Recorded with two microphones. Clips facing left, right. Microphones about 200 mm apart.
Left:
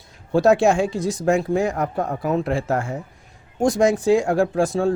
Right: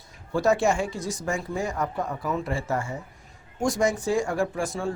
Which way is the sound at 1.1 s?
70° left (ahead or behind).